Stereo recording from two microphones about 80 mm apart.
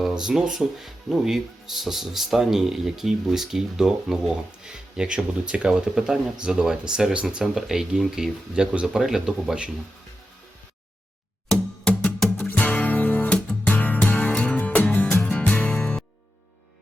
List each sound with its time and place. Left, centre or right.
0.0 s speech: centre
11.4 s music: centre
12.4 s music: left